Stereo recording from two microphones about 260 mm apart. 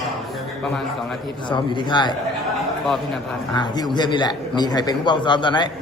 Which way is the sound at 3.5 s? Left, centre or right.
Centre.